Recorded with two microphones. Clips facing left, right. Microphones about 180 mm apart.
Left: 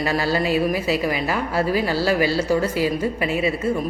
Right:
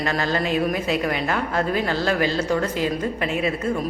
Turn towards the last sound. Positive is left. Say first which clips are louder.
# left 2 dB
turn(degrees=5)  # may be behind; listen again after turning